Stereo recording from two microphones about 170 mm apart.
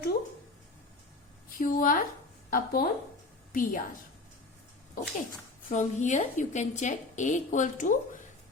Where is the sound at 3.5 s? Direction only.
50° left (ahead or behind).